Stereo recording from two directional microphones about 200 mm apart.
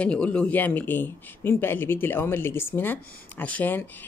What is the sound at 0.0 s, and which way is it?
Speech, 5° left (ahead or behind).